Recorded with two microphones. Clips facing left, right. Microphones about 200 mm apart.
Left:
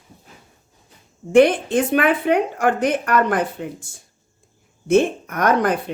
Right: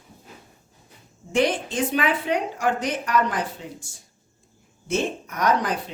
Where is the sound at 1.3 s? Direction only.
55° left (ahead or behind).